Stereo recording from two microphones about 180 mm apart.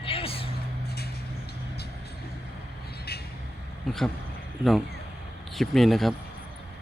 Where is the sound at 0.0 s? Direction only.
30° left (ahead or behind).